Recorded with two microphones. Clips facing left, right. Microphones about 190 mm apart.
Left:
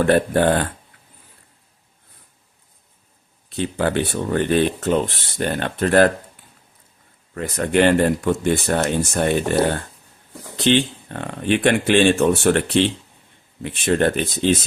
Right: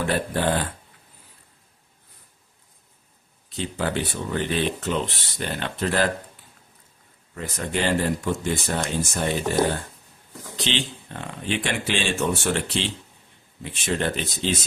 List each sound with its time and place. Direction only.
0.0 s speech: 55° left (ahead or behind)
3.6 s speech: 60° left (ahead or behind)
7.3 s speech: 60° left (ahead or behind)